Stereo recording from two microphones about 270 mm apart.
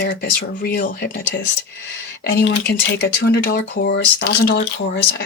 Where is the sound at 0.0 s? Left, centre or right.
Left.